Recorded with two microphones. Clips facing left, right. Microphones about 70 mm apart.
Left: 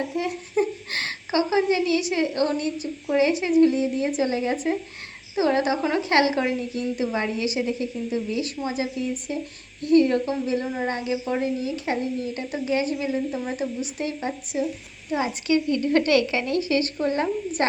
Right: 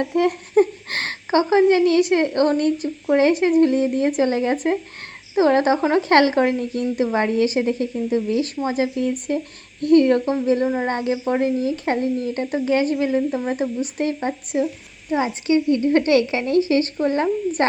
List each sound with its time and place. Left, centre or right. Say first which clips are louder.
0.0 s speech: right 7 dB; right